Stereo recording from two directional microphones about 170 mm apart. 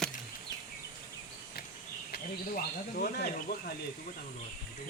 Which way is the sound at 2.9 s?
65° left (ahead or behind).